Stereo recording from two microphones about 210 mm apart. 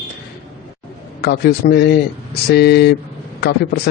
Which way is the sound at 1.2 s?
50° left (ahead or behind).